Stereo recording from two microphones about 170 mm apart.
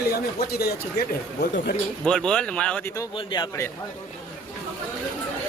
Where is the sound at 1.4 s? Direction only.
80° left.